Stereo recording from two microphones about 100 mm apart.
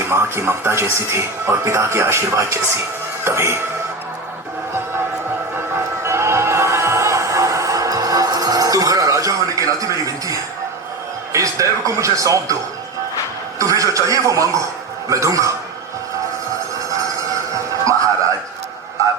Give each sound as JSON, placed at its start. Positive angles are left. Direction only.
{"t": 0.1, "sound": "speech", "side_deg": -25}
{"t": 5.7, "sound": "music", "side_deg": -25}
{"t": 11.3, "sound": "a man's voice", "side_deg": -30}
{"t": 13.6, "sound": "a man's voice", "side_deg": -35}
{"t": 17.5, "sound": "music", "side_deg": -35}